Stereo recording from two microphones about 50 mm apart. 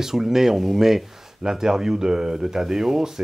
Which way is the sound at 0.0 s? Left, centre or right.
Centre.